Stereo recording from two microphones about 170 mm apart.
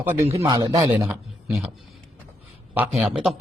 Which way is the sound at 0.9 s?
10° right (ahead or behind).